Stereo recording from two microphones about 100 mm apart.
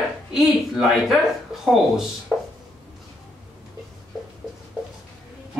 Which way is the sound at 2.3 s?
Centre (ahead or behind).